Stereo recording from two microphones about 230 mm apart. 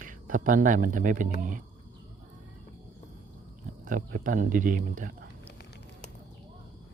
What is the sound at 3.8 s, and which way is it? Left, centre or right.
Speech, right.